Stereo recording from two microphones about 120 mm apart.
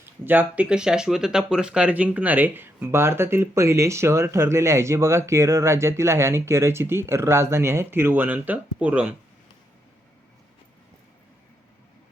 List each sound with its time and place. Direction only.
0.0 s speech: 15° right (ahead or behind)